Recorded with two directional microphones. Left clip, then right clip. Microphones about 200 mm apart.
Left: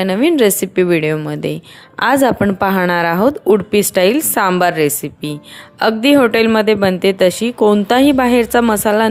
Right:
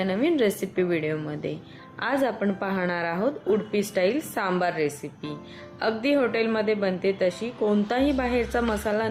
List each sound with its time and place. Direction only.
0.0 s a woman's voice: 50° left (ahead or behind)